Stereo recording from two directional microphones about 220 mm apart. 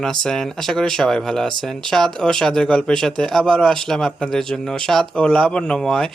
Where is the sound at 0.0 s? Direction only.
Centre (ahead or behind).